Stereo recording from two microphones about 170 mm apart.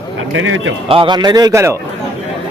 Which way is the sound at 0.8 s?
30° right (ahead or behind).